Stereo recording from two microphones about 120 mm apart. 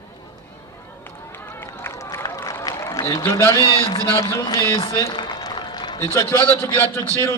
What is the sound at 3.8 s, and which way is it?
Speech, 50° left (ahead or behind).